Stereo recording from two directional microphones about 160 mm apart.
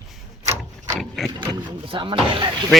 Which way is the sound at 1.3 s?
30° right (ahead or behind).